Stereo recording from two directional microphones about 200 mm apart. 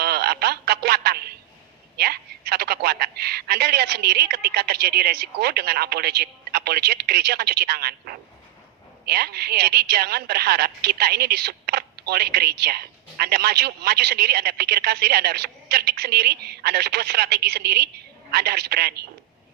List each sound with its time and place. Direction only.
0.0 s telephone: 50° right (ahead or behind)
2.0 s a woman's voice: 50° right (ahead or behind)